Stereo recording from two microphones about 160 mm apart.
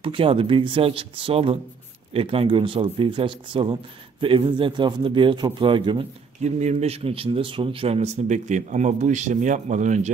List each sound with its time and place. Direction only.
0.0 s a man's voice: 35° right (ahead or behind)
6.4 s speech: 45° right (ahead or behind)